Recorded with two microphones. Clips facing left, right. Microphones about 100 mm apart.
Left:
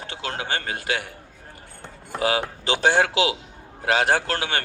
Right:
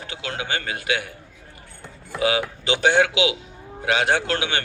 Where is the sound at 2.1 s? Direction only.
40° left (ahead or behind).